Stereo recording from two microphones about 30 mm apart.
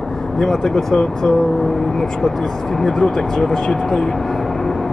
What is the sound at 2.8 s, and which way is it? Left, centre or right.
Speech, centre.